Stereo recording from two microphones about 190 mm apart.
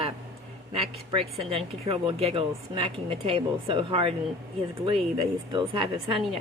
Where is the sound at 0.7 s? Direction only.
30° right (ahead or behind).